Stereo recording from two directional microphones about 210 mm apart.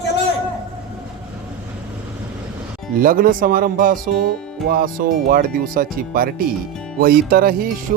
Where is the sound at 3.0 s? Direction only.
40° right (ahead or behind).